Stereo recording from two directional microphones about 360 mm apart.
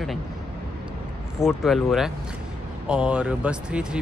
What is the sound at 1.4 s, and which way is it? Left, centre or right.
Speech, centre.